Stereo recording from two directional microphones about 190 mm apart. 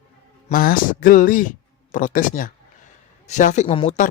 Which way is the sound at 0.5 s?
50° left (ahead or behind).